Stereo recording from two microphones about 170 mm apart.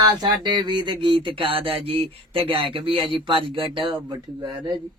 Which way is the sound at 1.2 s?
30° right (ahead or behind).